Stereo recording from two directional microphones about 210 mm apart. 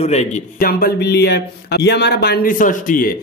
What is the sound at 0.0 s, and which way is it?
Speech, 30° left (ahead or behind).